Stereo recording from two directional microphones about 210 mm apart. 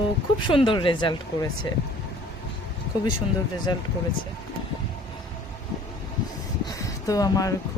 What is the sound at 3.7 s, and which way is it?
Speech, 20° left (ahead or behind).